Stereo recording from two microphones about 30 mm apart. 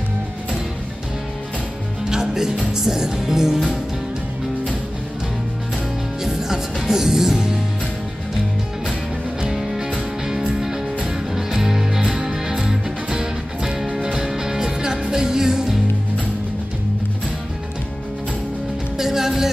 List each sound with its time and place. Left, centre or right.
2.0 s music: centre
6.9 s music: centre
9.5 s music: centre
10.2 s music: right
18.9 s music: centre